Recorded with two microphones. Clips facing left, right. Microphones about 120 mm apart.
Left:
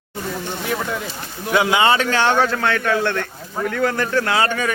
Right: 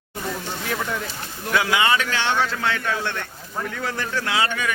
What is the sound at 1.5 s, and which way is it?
A man's voice, 25° left (ahead or behind).